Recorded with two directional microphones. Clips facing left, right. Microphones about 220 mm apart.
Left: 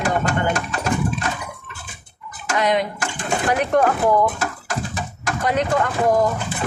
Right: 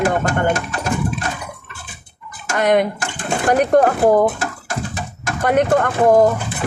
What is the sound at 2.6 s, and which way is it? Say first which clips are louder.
Speech: right 5 dB; 55° right (ahead or behind).